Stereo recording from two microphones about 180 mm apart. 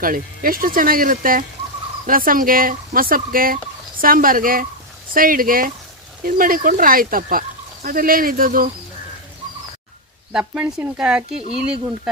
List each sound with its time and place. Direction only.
0.0 s speech: 50° right (ahead or behind)
10.3 s speech: 10° right (ahead or behind)